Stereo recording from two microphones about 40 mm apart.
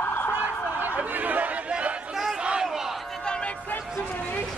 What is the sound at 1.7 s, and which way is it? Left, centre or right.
Chatter, right.